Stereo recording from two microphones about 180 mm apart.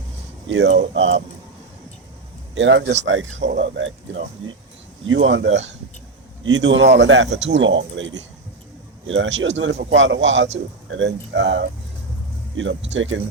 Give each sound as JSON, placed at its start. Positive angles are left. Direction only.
{"t": 0.4, "sound": "speech", "side_deg": -85}
{"t": 2.6, "sound": "speech", "side_deg": -75}
{"t": 3.0, "sound": "speech", "side_deg": -90}